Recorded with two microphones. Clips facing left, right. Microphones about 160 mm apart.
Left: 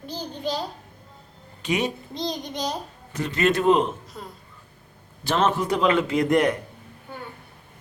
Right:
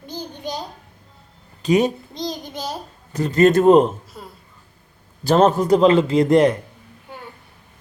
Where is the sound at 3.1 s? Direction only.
40° right (ahead or behind).